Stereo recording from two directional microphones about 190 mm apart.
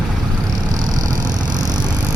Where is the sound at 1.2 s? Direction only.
20° right (ahead or behind).